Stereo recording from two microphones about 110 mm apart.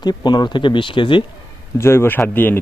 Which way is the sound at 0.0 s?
40° left (ahead or behind).